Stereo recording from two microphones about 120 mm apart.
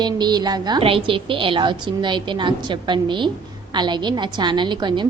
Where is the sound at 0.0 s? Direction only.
35° right (ahead or behind).